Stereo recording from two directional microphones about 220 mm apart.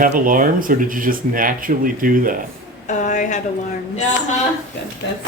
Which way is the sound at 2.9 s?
35° left (ahead or behind).